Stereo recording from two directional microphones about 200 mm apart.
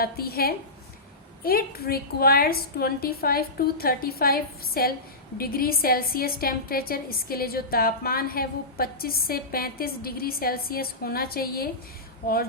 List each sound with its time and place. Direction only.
0.0 s a woman's voice: 50° left (ahead or behind)